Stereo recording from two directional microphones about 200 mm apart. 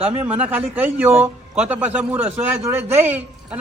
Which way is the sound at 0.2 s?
10° right (ahead or behind).